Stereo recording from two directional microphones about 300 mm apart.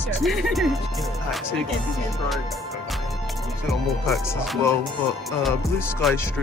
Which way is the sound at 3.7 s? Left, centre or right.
Centre.